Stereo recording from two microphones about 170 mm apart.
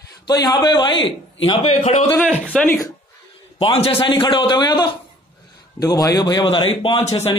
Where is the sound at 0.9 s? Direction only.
90° left.